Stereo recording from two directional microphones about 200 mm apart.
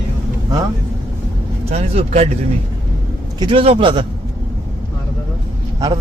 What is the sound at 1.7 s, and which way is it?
Speech, 30° right (ahead or behind).